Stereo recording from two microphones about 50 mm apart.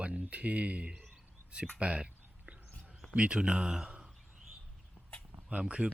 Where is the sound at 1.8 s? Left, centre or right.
Right.